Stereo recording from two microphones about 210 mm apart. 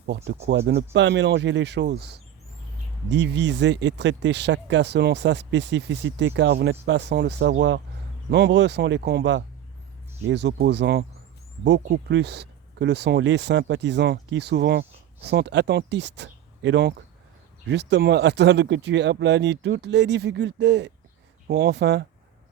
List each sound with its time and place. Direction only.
0.4 s speech: 55° right (ahead or behind)